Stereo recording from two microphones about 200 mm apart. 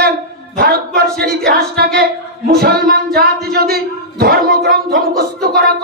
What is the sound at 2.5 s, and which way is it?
A man's voice, 50° right (ahead or behind).